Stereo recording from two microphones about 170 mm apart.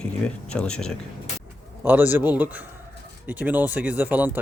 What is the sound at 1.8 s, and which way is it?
Speech, 10° right (ahead or behind).